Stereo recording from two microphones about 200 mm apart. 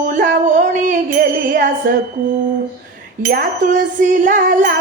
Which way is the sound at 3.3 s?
40° right (ahead or behind).